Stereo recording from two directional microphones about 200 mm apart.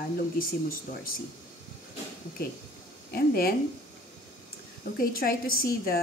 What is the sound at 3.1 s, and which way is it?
Speech, 50° left (ahead or behind).